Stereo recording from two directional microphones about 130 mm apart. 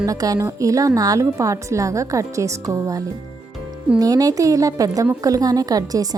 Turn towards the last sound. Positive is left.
turn(degrees=-30)  # may be behind; listen again after turning